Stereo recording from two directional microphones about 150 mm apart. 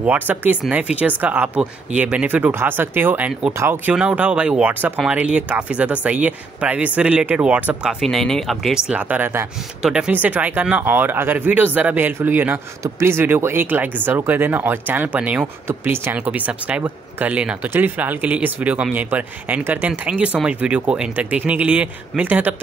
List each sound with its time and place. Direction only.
0.0 s speech: 10° right (ahead or behind)